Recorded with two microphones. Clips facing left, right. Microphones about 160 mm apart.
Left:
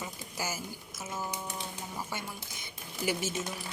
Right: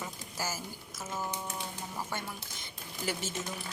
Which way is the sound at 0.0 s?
15° left (ahead or behind).